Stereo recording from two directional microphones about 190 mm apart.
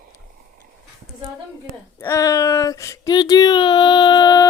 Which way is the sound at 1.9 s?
15° left (ahead or behind).